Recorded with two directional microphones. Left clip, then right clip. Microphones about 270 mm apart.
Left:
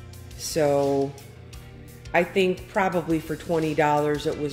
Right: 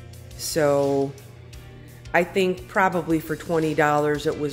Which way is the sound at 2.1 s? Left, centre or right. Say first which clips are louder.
Right 1 dB; centre.